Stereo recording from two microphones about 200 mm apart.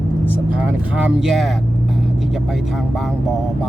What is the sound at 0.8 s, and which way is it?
Speech, 5° right (ahead or behind).